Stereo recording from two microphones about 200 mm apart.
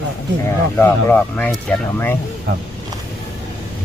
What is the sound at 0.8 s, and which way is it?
Speech, 10° left (ahead or behind).